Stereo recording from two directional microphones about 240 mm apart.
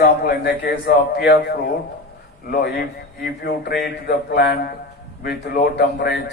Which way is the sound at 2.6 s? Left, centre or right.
Left.